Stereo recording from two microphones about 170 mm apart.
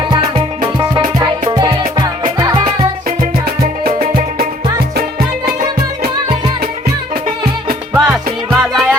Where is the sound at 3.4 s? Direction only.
60° right (ahead or behind).